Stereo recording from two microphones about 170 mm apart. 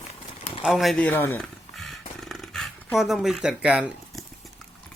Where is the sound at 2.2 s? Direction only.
Centre (ahead or behind).